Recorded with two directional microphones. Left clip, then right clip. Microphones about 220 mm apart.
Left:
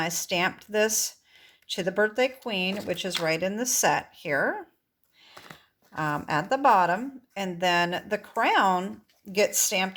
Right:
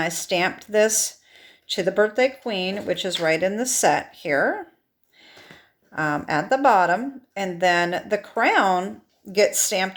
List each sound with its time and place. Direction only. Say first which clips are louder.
0.0 s speech: right 4 dB; 20° left (ahead or behind)
5.9 s speech: right 4 dB; 25° left (ahead or behind)